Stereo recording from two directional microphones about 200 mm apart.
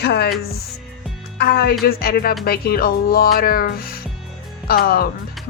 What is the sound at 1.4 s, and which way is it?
Speech, 50° left (ahead or behind).